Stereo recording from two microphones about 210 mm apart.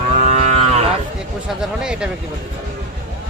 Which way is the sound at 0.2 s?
35° right (ahead or behind).